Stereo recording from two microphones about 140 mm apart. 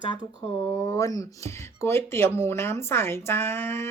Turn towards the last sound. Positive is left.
turn(degrees=15)  # may be behind; listen again after turning